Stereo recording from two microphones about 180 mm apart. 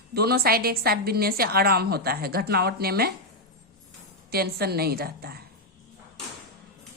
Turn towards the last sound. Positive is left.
turn(degrees=-60)  # may be behind; listen again after turning